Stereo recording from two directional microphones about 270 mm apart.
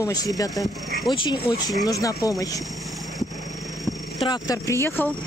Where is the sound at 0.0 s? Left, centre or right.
Centre.